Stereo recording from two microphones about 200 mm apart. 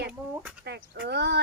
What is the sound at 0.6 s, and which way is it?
Speech, 55° right (ahead or behind).